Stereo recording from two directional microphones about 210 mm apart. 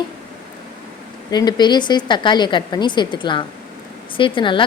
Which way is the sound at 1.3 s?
20° left (ahead or behind).